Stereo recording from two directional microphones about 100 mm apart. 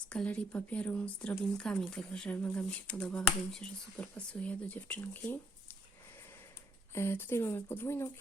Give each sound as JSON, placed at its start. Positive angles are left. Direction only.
{"t": 0.1, "sound": "speech", "side_deg": 10}
{"t": 6.9, "sound": "speech", "side_deg": 25}